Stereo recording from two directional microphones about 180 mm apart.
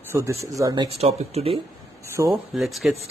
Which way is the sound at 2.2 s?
15° right (ahead or behind).